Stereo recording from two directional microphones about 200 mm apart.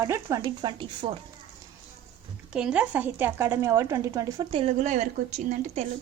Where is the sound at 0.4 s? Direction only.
25° right (ahead or behind).